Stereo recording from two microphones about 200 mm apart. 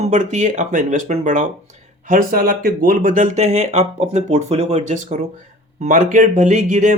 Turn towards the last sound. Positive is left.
turn(degrees=-35)  # may be behind; listen again after turning